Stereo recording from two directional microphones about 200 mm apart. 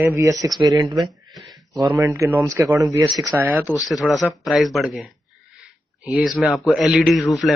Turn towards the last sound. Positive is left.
turn(degrees=0)  # may be behind; listen again after turning